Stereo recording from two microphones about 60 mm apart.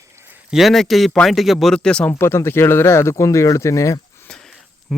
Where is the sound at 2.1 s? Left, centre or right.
Left.